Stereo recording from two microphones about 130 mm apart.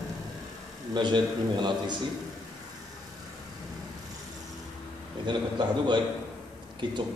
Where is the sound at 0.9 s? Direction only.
35° right (ahead or behind).